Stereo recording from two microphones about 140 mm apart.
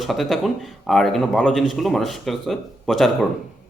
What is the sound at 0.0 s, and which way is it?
Speech, centre (ahead or behind).